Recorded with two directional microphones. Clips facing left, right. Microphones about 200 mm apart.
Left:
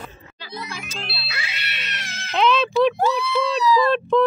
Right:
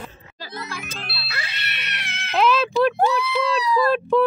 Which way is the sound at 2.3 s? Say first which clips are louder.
Even; 5° right (ahead or behind).